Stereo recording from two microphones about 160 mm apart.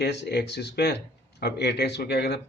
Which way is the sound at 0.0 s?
90° left.